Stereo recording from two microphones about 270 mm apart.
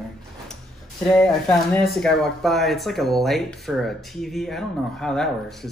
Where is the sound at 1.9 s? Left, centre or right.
Centre.